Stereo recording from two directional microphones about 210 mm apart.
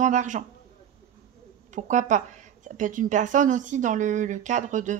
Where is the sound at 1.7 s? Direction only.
35° right (ahead or behind).